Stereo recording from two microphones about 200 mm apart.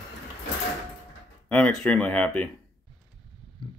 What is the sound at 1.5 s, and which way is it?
Speech, 5° left (ahead or behind).